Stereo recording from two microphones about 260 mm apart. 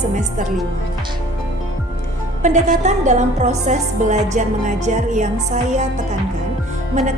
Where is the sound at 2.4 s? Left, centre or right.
Right.